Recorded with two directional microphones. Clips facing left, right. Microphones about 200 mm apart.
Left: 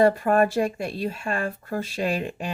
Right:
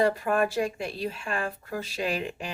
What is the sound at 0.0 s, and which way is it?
Speech, 45° left (ahead or behind).